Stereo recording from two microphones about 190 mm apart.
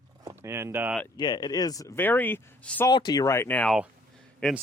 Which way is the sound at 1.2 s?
20° left (ahead or behind).